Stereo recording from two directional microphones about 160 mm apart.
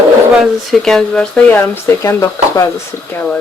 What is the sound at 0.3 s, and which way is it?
Speech, centre (ahead or behind).